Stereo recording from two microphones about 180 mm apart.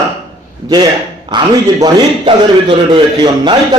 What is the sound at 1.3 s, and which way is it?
A man's voice, 25° right (ahead or behind).